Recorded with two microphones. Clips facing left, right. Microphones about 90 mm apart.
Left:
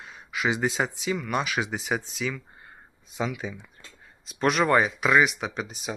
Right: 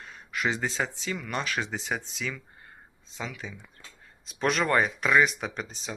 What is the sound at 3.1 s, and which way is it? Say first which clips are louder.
Speech: left 7 dB; 15° left (ahead or behind).